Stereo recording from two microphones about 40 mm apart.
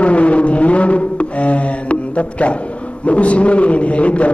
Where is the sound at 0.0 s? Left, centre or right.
Left.